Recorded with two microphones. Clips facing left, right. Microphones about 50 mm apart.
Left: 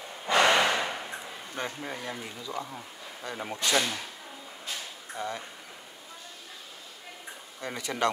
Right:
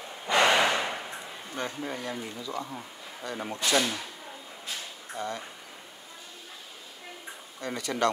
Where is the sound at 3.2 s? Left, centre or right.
Left.